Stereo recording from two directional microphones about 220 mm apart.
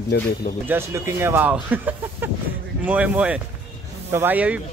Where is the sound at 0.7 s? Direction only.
10° right (ahead or behind).